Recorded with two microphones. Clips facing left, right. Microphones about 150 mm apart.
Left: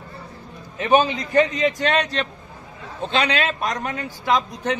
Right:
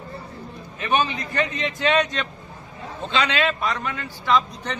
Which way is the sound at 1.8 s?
35° left (ahead or behind).